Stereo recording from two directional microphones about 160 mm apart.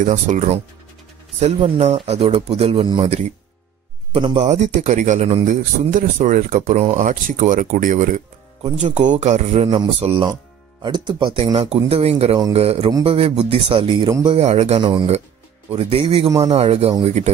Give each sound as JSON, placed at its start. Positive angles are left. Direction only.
{"t": 0.0, "sound": "a man's voice", "side_deg": -55}
{"t": 3.0, "sound": "a man's voice", "side_deg": -45}
{"t": 14.8, "sound": "a man's voice", "side_deg": -30}